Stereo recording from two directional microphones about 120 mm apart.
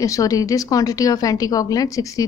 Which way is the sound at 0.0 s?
30° left (ahead or behind).